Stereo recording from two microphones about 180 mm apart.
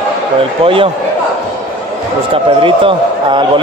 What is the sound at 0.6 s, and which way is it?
Speech, 30° right (ahead or behind).